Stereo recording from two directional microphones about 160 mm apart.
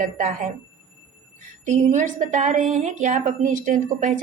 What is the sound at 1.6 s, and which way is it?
A woman's voice, 50° right (ahead or behind).